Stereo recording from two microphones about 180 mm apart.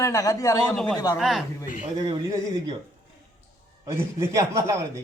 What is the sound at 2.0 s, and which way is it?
Speech, 25° right (ahead or behind).